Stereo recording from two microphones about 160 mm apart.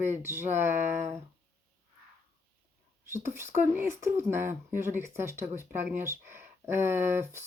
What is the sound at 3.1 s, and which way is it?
Speech, 15° right (ahead or behind).